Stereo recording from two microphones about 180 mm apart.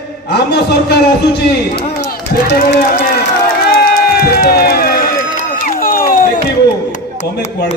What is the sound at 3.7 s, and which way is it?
Crowd, 55° left (ahead or behind).